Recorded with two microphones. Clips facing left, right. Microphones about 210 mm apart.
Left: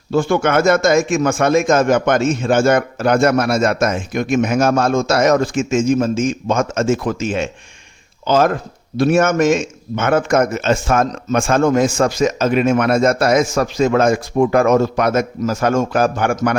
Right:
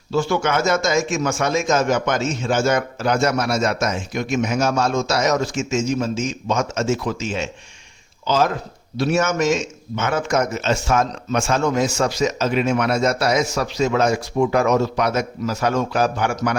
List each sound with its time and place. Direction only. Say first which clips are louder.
0.1 s a man's voice: left 5 dB; 55° left (ahead or behind)